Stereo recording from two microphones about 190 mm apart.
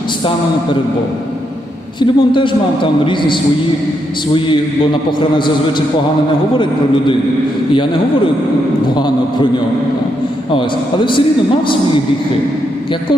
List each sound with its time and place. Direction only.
2.0 s a man's voice: 25° left (ahead or behind)
9.0 s a man's voice: 20° left (ahead or behind)
10.5 s a man's voice: 25° left (ahead or behind)